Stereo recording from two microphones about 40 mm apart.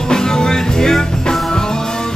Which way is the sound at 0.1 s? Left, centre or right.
Centre.